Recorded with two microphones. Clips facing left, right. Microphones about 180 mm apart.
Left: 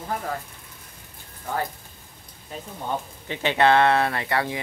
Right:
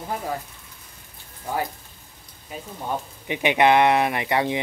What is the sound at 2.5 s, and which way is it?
Speech, 10° right (ahead or behind).